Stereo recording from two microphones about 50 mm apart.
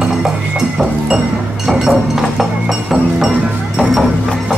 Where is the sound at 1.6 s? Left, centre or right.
Centre.